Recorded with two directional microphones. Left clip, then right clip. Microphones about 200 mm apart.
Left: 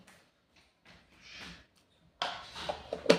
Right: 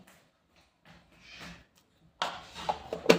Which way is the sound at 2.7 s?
50° right (ahead or behind).